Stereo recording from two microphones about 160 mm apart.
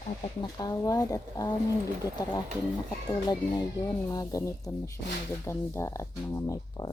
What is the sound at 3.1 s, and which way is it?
Speech, 25° left (ahead or behind).